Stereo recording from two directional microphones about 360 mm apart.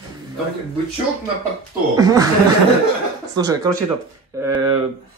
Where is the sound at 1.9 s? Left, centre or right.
Centre.